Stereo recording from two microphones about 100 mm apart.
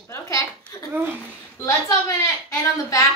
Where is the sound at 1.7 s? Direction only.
30° left (ahead or behind).